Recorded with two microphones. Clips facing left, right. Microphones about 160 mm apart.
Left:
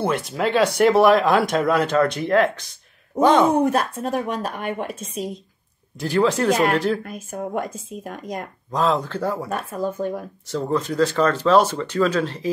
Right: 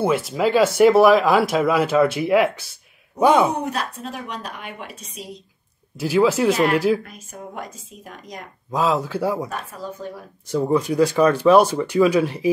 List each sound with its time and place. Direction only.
0.0 s speech: centre (ahead or behind)
3.5 s a woman's voice: 50° left (ahead or behind)
5.9 s speech: 5° right (ahead or behind)
7.1 s a woman's voice: 50° left (ahead or behind)
8.7 s speech: 5° right (ahead or behind)
9.5 s a woman's voice: 50° left (ahead or behind)
10.5 s speech: 10° right (ahead or behind)